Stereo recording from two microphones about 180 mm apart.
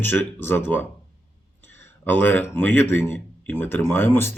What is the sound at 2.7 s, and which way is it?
Speech, 85° right.